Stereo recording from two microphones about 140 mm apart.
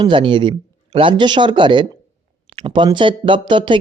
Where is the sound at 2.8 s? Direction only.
35° right (ahead or behind).